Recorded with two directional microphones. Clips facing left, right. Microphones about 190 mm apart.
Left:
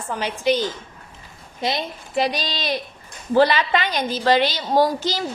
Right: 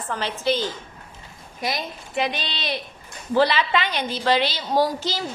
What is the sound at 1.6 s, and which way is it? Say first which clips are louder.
A woman's voice: left 3 dB; 30° left (ahead or behind).